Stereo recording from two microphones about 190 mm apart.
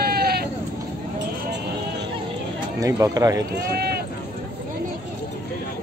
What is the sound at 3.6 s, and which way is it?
Speech, 55° right (ahead or behind).